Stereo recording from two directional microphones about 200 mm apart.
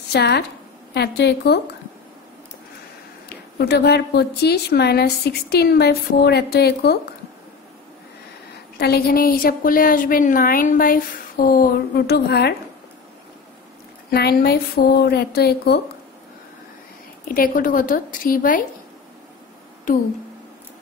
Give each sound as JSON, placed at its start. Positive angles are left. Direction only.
{"t": 0.1, "sound": "a woman's voice", "side_deg": 55}
{"t": 3.3, "sound": "a woman's voice", "side_deg": 55}
{"t": 8.7, "sound": "a woman's voice", "side_deg": 50}
{"t": 14.1, "sound": "a woman's voice", "side_deg": 50}
{"t": 17.3, "sound": "a woman's voice", "side_deg": 45}
{"t": 19.9, "sound": "a woman's voice", "side_deg": 40}